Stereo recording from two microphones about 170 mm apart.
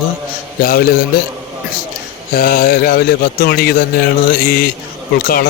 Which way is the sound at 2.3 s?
60° left (ahead or behind).